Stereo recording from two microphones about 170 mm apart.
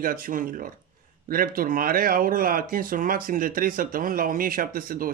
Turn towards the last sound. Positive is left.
turn(degrees=-55)  # may be behind; listen again after turning